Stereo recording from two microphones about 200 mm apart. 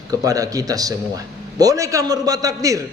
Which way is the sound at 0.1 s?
15° right (ahead or behind).